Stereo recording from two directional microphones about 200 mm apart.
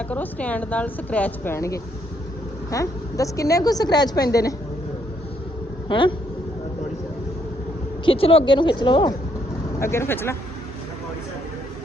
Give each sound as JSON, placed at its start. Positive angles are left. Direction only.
{"t": 0.1, "sound": "speech", "side_deg": 5}
{"t": 5.9, "sound": "a woman's voice", "side_deg": 25}
{"t": 8.0, "sound": "a woman's voice", "side_deg": 30}